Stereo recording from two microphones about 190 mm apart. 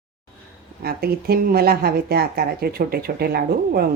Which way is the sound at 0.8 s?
55° right (ahead or behind).